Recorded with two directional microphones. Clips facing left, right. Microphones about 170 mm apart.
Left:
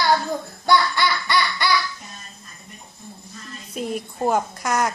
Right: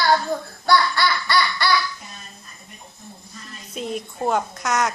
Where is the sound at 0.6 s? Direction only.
20° left (ahead or behind).